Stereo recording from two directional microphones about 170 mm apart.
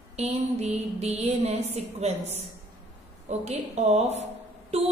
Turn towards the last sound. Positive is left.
turn(degrees=-40)  # may be behind; listen again after turning